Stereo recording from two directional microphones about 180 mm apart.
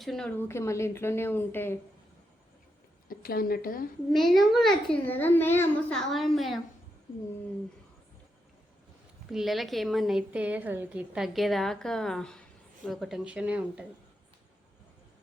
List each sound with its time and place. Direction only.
0.0 s speech: centre (ahead or behind)
3.1 s speech: 55° left (ahead or behind)
4.1 s a woman's voice: centre (ahead or behind)
6.0 s a woman's voice: centre (ahead or behind)
9.3 s a woman's voice: centre (ahead or behind)